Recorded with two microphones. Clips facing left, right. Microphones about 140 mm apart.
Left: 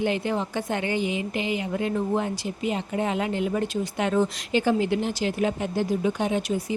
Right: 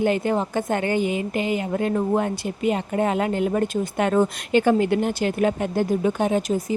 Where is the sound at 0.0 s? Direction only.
45° right (ahead or behind).